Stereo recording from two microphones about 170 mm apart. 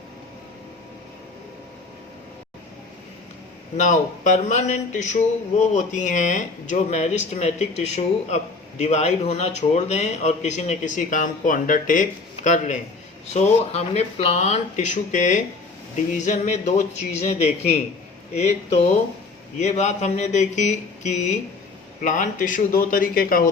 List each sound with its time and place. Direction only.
3.8 s a man's voice: 45° left (ahead or behind)